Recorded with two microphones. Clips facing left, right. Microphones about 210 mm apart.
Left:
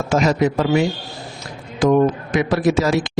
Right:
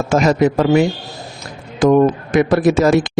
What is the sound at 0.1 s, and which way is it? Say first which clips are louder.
A man's voice: right 3 dB; 50° right (ahead or behind).